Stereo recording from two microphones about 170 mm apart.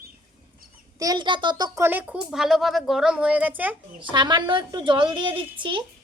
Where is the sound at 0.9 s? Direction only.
20° right (ahead or behind).